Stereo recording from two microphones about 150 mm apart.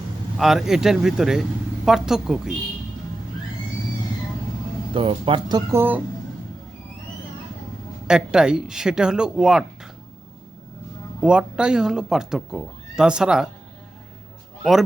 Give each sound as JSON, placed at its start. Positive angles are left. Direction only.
{"t": 0.3, "sound": "speech", "side_deg": 0}
{"t": 4.9, "sound": "speech", "side_deg": -35}
{"t": 5.7, "sound": "speech", "side_deg": -15}
{"t": 8.0, "sound": "speech", "side_deg": -5}
{"t": 11.2, "sound": "speech", "side_deg": -5}
{"t": 14.6, "sound": "a man's voice", "side_deg": 0}